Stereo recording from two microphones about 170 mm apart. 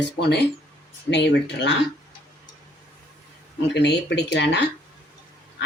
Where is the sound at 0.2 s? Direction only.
80° left.